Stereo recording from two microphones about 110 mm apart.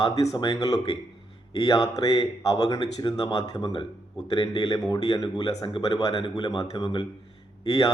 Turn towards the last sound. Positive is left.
turn(degrees=35)  # may be behind; listen again after turning